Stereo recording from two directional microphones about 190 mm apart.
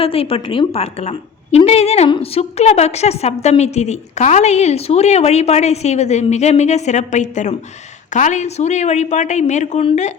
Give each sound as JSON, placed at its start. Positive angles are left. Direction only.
{"t": 0.0, "sound": "a woman's voice", "side_deg": 30}